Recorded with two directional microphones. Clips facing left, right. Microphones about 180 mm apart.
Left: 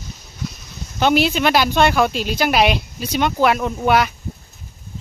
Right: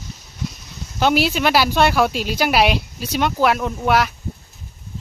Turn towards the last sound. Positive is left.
turn(degrees=0)  # may be behind; listen again after turning